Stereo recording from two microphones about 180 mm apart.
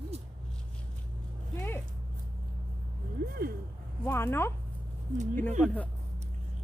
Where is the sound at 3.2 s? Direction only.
55° right (ahead or behind).